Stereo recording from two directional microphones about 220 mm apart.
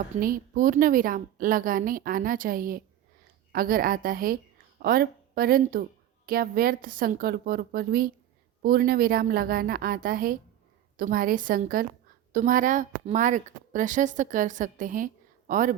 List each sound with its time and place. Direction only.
0.2 s speech: 40° right (ahead or behind)